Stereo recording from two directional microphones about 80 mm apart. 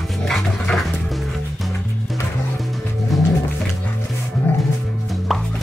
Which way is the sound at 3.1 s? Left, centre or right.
Centre.